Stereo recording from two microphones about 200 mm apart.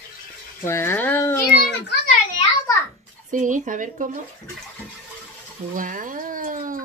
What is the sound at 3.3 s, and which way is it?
Speech, 40° right (ahead or behind).